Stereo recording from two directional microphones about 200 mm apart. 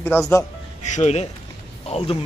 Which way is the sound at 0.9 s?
35° left (ahead or behind).